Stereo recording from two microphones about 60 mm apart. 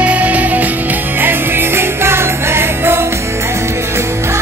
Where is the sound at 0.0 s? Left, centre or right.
Right.